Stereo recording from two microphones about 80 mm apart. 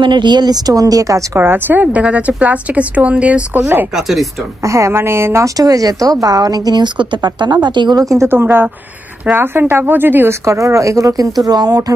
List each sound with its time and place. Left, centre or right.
0.0 s speech: right
1.4 s a woman's voice: right
1.9 s a woman's voice: centre
3.9 s speech: centre
4.6 s speech: right
5.6 s a woman's voice: right
8.0 s speech: right
8.3 s a woman's voice: right
10.4 s speech: right